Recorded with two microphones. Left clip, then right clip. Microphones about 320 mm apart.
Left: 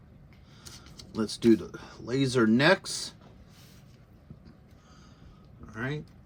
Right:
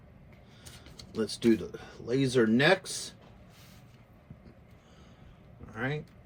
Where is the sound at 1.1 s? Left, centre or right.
Centre.